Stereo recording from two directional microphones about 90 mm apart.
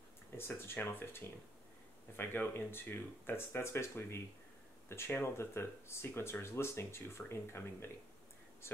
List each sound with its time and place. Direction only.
0.4 s speech: 25° left (ahead or behind)